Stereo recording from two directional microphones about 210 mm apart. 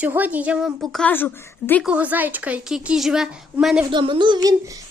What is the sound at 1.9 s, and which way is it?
A woman's voice, 5° right (ahead or behind).